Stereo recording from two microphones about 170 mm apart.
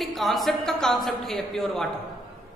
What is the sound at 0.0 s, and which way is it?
A woman's voice, centre (ahead or behind).